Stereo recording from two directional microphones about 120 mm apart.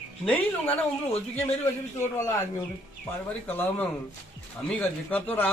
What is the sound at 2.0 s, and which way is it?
Speech, 25° left (ahead or behind).